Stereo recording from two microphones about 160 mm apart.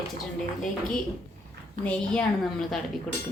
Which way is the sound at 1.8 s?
5° left (ahead or behind).